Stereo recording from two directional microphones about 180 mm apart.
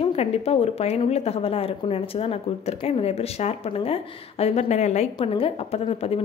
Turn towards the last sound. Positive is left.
turn(degrees=35)  # may be behind; listen again after turning